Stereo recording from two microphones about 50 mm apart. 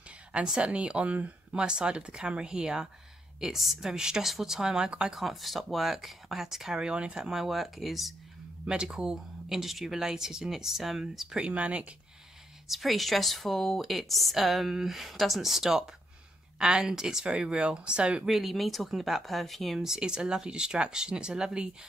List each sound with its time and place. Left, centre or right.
0.6 s speech: right
5.1 s a woman's voice: centre
7.2 s a woman's voice: centre
8.6 s speech: centre
11.4 s speech: right
12.6 s a woman's voice: centre
18.2 s a woman's voice: centre
19.8 s speech: centre